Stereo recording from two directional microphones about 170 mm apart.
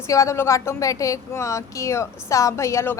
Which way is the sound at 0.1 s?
20° left (ahead or behind).